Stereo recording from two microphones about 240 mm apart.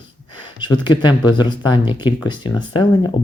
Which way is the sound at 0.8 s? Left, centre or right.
Centre.